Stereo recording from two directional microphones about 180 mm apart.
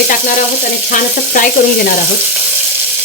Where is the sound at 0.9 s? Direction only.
50° left (ahead or behind).